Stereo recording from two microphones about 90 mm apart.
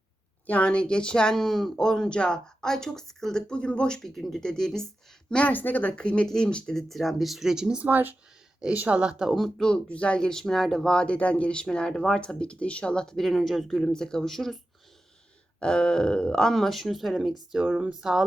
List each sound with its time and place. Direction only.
0.4 s speech: 15° left (ahead or behind); by 7.9 s 10° right (ahead or behind)
7.9 s speech: 20° right (ahead or behind); by 9.5 s 5° right (ahead or behind)
9.6 s speech: 10° left (ahead or behind)
15.6 s speech: 10° left (ahead or behind)
17.6 s speech: 20° right (ahead or behind)
17.9 s speech: 5° right (ahead or behind)